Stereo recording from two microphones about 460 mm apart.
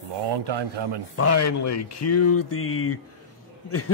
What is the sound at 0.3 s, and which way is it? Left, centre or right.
Speech, right.